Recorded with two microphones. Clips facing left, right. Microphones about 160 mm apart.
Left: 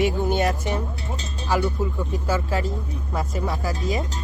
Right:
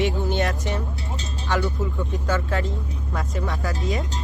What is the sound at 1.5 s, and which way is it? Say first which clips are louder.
Speech: left 2 dB; 10° left (ahead or behind).